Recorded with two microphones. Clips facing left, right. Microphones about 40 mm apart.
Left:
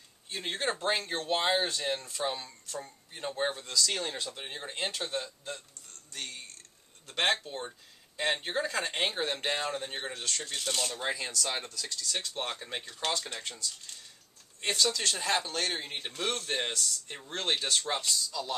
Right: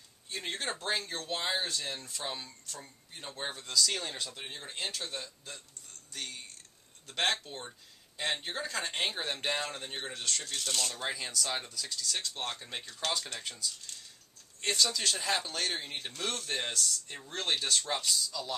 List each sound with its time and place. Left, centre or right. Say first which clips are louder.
0.3 s a man's voice: left 4 dB; centre
2.0 s a man's voice: left 5 dB; centre
7.1 s a man's voice: left 3 dB; centre
12.0 s a man's voice: left 2 dB; centre
13.9 s a sound: even; centre
14.8 s a man's voice: left 2 dB; centre